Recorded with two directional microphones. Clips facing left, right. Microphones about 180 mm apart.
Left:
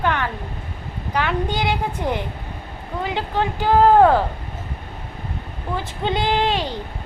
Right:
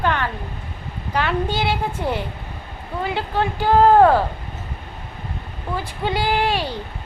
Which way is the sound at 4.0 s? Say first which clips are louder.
Even; 10° right (ahead or behind).